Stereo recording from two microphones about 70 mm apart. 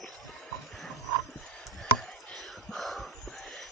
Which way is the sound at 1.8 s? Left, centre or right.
Centre.